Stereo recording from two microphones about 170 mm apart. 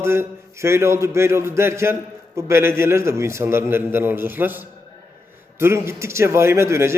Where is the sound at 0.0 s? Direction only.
15° right (ahead or behind).